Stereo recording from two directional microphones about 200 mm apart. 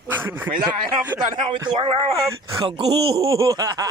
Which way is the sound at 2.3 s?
15° right (ahead or behind).